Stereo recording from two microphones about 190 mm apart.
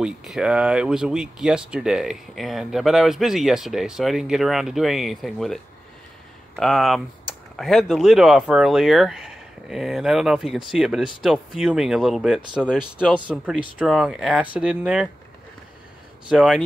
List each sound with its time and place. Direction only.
0.0 s speech: 5° right (ahead or behind)
16.3 s speech: 5° right (ahead or behind)